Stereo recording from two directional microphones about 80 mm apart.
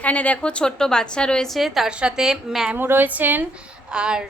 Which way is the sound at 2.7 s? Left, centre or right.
Right.